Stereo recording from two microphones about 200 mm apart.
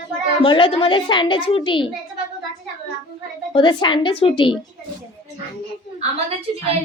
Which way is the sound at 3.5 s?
25° left (ahead or behind).